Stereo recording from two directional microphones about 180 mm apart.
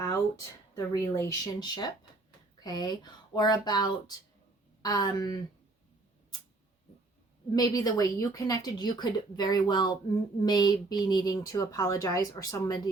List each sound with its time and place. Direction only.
0.8 s a woman's voice: 15° left (ahead or behind)
7.5 s a woman's voice: 20° left (ahead or behind)